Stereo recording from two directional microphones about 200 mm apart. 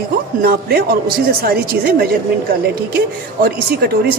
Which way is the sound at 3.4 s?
50° right (ahead or behind).